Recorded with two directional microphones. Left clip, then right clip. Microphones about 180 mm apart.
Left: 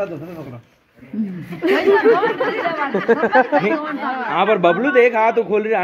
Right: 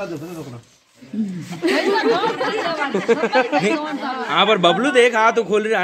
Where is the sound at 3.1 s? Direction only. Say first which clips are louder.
Left 3 dB; 25° left (ahead or behind).